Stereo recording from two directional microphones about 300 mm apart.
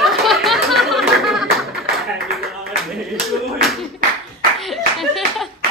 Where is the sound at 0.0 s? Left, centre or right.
Centre.